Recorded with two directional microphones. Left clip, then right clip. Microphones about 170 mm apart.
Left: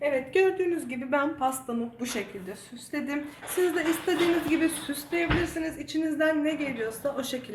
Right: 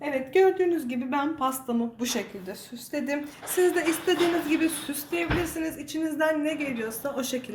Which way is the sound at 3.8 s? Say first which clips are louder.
Right 2 dB; 50° right (ahead or behind).